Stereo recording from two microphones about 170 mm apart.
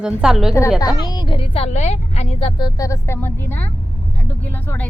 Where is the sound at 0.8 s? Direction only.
25° left (ahead or behind).